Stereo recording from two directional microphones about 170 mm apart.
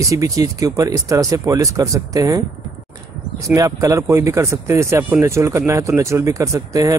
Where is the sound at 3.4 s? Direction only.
20° right (ahead or behind).